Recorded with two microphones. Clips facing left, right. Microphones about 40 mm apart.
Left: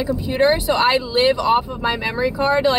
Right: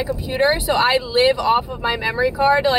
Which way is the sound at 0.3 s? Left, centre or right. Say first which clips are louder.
Left 1 dB; centre.